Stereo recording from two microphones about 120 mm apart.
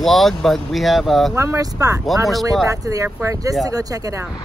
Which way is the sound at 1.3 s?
25° right (ahead or behind).